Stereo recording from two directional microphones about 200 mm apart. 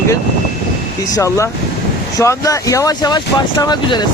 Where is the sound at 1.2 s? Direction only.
15° left (ahead or behind).